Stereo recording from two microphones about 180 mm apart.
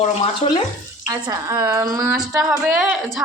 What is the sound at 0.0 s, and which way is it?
Speech, 25° left (ahead or behind).